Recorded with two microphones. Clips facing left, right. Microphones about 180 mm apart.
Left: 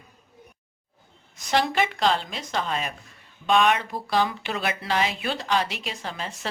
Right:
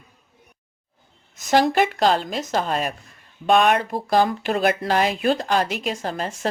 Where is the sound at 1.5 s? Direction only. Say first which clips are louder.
Right 6 dB; 45° right (ahead or behind).